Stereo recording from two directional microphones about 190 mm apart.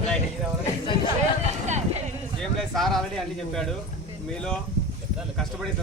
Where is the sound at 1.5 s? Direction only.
35° right (ahead or behind).